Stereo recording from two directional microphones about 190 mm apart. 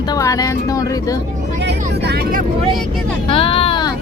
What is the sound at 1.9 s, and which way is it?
Speech, 60° right (ahead or behind).